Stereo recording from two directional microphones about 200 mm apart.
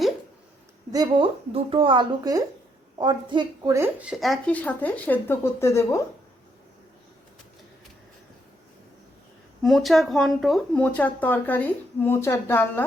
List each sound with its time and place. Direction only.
0.9 s a woman's voice: 20° right (ahead or behind); by 6.0 s 15° left (ahead or behind)
9.6 s speech: centre (ahead or behind)